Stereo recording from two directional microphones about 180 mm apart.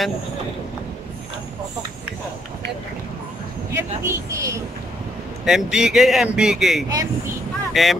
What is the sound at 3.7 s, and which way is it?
Vehicle, 15° right (ahead or behind).